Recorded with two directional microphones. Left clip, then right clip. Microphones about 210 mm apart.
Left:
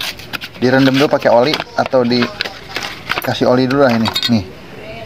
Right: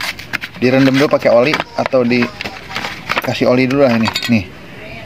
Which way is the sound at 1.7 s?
Centre (ahead or behind).